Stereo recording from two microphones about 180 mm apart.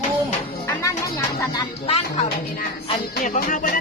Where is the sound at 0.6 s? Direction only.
15° left (ahead or behind).